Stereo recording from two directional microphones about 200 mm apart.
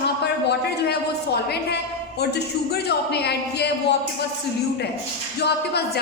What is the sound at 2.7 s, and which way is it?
Speech, 55° left (ahead or behind).